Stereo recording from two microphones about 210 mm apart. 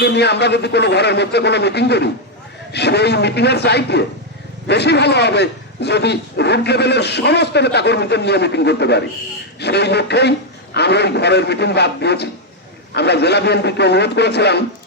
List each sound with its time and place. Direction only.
0.0 s a man's voice: 55° left (ahead or behind)